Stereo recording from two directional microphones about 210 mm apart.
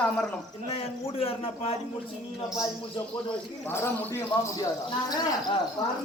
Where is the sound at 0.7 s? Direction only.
25° left (ahead or behind).